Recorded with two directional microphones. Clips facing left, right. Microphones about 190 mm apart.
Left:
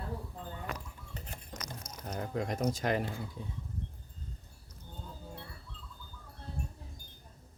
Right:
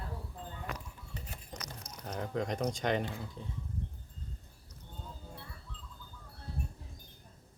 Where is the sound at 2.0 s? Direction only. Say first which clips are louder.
Even; centre (ahead or behind).